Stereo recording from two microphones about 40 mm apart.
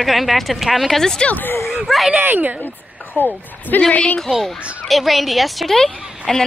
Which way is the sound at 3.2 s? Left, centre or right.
Left.